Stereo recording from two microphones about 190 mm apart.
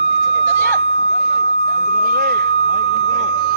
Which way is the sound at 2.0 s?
55° right (ahead or behind).